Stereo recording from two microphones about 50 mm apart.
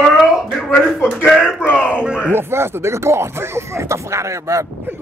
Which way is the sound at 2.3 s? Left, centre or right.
Right.